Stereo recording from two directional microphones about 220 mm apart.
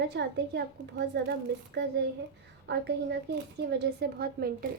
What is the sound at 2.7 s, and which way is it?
A woman's voice, 50° right (ahead or behind).